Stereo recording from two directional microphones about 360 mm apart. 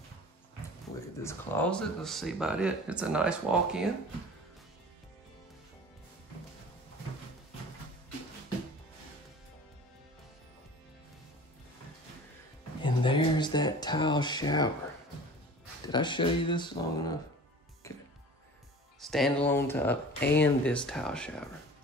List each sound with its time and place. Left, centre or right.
1.2 s speech: centre
12.8 s a sound: centre
15.9 s speech: centre
17.8 s music: centre
18.9 s speech: centre
20.2 s speech: left
20.4 s speech: centre